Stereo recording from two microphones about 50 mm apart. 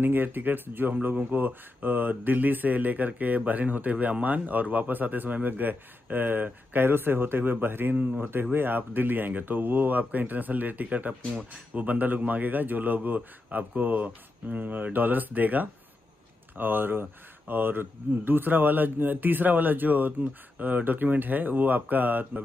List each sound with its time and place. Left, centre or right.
0.0 s speech: right